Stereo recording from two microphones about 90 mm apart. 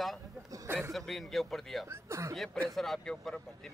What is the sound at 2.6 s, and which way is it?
Speech, 5° left (ahead or behind).